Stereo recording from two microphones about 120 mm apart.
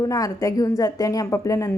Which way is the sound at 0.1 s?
30° left (ahead or behind).